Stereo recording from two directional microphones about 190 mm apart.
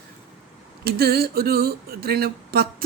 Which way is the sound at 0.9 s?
55° right (ahead or behind).